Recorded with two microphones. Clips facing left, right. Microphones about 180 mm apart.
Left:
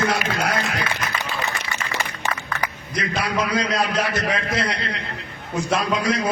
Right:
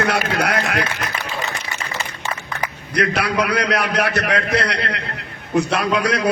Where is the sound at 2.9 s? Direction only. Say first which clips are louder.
Right 5 dB; 70° right (ahead or behind).